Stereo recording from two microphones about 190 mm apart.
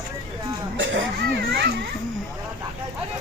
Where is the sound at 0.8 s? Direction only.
70° right (ahead or behind).